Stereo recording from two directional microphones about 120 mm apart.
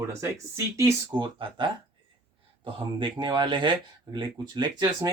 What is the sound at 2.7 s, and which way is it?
Speech, 40° right (ahead or behind).